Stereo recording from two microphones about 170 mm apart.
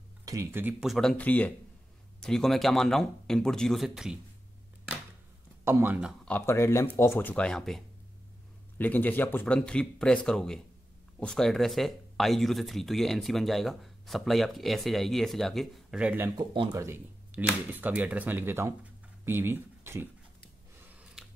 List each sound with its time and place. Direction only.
0.2 s speech: 20° right (ahead or behind)
0.7 s speech: centre (ahead or behind)
5.7 s speech: 10° right (ahead or behind)
6.2 s speech: 10° left (ahead or behind); by 16.3 s 10° right (ahead or behind)
16.3 s speech: 20° right (ahead or behind)
20.9 s scissors: 5° right (ahead or behind)